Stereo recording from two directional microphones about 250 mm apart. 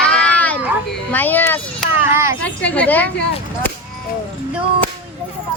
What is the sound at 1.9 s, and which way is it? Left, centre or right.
Speech, centre.